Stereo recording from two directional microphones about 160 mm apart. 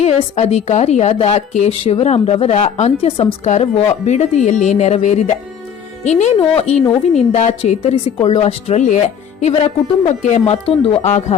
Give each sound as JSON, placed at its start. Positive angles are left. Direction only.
{"t": 0.0, "sound": "a woman's voice", "side_deg": 40}